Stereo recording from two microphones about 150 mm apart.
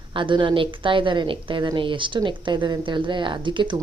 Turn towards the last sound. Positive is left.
turn(degrees=-30)  # may be behind; listen again after turning